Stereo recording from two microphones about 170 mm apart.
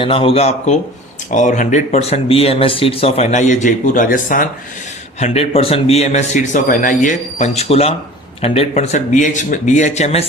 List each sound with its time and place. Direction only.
0.0 s speech: 30° left (ahead or behind); by 4.4 s 55° left (ahead or behind)
5.2 s speech: 40° left (ahead or behind)
8.7 s a man's voice: 50° left (ahead or behind)